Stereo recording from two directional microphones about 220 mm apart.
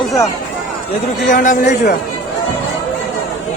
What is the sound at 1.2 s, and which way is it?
Speech, 35° left (ahead or behind).